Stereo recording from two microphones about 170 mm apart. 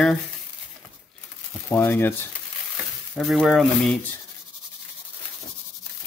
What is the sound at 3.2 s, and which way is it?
Speech, centre (ahead or behind).